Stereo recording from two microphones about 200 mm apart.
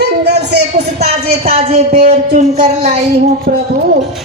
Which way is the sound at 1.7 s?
35° right (ahead or behind).